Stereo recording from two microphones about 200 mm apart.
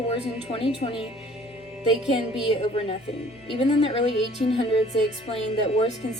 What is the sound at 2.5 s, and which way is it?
A woman's voice, 25° left (ahead or behind).